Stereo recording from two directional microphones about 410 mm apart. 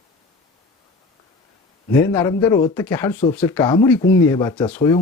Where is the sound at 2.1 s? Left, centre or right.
Centre.